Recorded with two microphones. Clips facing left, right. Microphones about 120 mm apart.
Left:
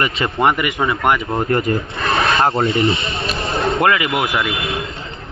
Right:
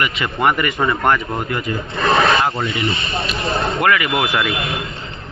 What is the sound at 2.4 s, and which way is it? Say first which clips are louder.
Speech: left 4 dB; 30° left (ahead or behind).